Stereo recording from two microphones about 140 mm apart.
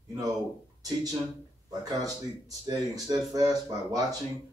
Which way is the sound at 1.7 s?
25° right (ahead or behind).